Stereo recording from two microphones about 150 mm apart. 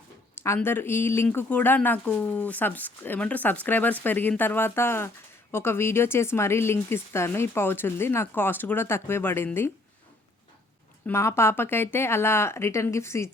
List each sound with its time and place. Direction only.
0.4 s speech: 15° left (ahead or behind)
11.0 s speech: 15° left (ahead or behind)